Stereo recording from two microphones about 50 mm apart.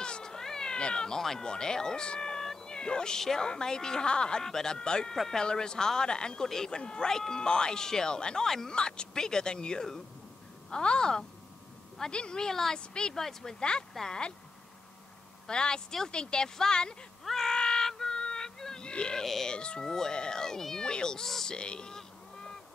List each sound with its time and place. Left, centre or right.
0.0 s speech: centre
5.1 s speech: centre
5.4 s speech: centre
15.4 s speech: centre
17.2 s a sound: centre
19.2 s speech: centre
19.5 s speech: centre
21.5 s goose: centre